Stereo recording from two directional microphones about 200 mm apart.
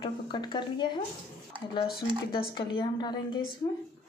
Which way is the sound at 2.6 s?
25° left (ahead or behind).